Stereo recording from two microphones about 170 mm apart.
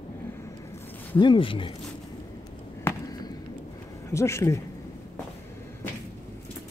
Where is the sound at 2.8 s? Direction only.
25° left (ahead or behind).